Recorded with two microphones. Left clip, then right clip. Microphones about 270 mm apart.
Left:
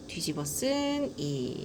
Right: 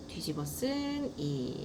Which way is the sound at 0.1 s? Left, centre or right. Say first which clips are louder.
Left 4 dB; left.